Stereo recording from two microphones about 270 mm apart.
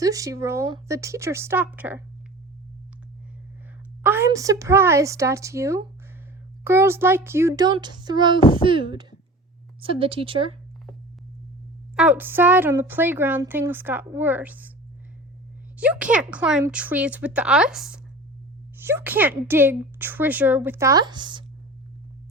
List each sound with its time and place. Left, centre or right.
0.0 s a woman's voice: centre
4.0 s a woman's voice: centre
11.9 s a woman's voice: centre
15.8 s a woman's voice: centre